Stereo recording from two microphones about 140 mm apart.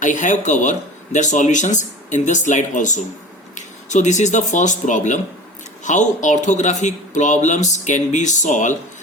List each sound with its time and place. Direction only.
0.0 s speech: 60° left (ahead or behind)